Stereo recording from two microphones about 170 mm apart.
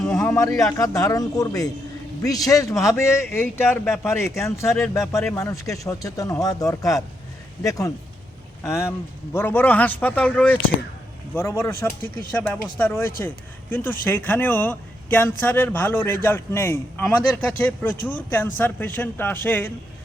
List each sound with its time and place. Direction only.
0.0 s a man's voice: 15° left (ahead or behind)